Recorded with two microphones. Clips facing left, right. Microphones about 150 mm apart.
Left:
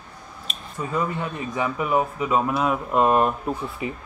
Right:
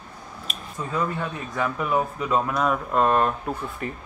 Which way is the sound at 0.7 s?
5° left (ahead or behind).